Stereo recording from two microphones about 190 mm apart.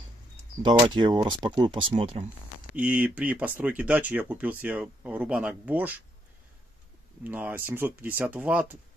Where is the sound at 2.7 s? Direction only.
10° right (ahead or behind).